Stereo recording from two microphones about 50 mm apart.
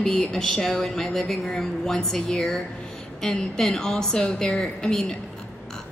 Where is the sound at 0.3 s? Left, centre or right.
Centre.